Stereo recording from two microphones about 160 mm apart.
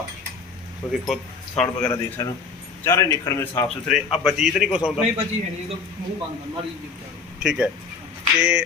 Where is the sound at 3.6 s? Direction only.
Centre (ahead or behind).